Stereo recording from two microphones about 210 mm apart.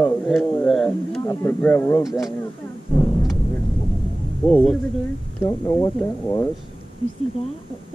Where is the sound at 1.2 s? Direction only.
15° left (ahead or behind).